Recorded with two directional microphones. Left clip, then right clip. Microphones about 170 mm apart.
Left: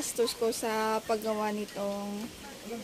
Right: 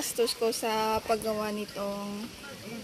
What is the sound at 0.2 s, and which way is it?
Speech, 5° left (ahead or behind).